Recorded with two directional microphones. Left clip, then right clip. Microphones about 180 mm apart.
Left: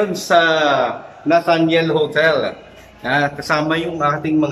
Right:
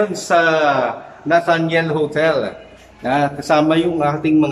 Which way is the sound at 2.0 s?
10° right (ahead or behind).